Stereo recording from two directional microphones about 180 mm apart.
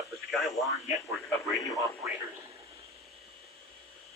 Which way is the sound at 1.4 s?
15° left (ahead or behind).